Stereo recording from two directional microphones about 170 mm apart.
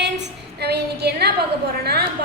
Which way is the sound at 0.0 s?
80° right.